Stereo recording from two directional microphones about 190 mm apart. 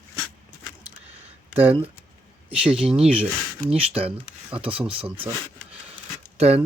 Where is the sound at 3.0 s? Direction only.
35° right (ahead or behind).